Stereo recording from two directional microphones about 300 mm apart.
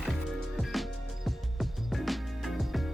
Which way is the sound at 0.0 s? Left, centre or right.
Centre.